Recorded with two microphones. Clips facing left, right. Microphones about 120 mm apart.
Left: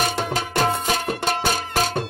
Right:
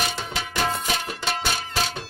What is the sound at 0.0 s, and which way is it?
Music, 45° left (ahead or behind).